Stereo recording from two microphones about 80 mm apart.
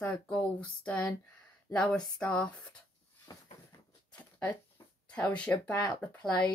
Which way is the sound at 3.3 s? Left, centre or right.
Left.